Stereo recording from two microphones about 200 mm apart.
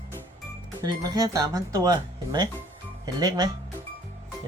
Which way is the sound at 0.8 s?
20° right (ahead or behind).